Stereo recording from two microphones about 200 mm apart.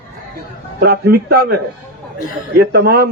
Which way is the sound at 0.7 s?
50° right (ahead or behind).